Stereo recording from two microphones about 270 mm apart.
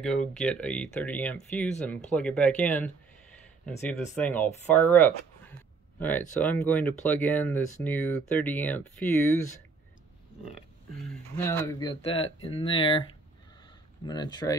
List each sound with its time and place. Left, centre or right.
0.0 s speech: centre
11.3 s speech: centre
14.0 s speech: centre